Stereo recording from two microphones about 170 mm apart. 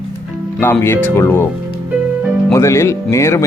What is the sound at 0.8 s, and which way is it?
Speech, 15° left (ahead or behind).